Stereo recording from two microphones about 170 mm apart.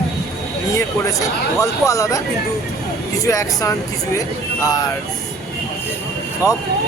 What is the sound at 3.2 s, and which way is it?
Speech, 20° left (ahead or behind).